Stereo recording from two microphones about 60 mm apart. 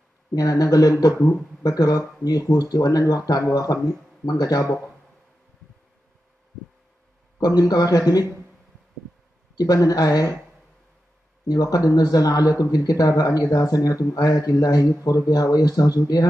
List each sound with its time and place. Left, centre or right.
0.3 s speech: left
7.3 s speech: left
9.6 s speech: left
11.4 s speech: left